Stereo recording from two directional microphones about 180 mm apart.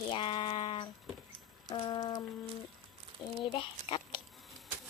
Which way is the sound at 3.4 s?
30° left (ahead or behind).